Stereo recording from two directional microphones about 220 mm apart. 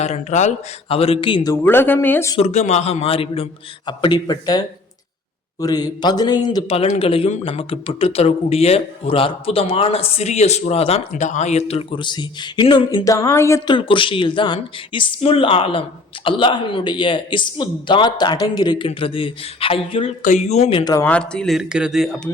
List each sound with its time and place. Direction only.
0.0 s a man's voice: 30° left (ahead or behind)
1.6 s speech: 10° left (ahead or behind)
2.4 s a man's voice: 30° left (ahead or behind); by 22.3 s centre (ahead or behind)